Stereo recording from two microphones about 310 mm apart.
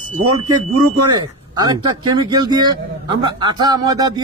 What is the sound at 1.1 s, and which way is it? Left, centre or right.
Speech, centre.